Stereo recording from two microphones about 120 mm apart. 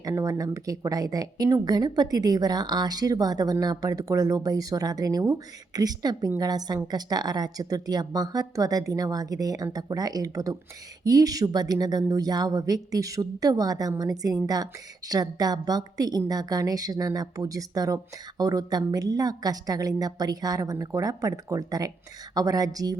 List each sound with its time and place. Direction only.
0.0 s a woman's voice: 25° right (ahead or behind)